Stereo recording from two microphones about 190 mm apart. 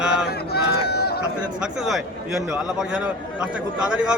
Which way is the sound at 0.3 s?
55° left (ahead or behind).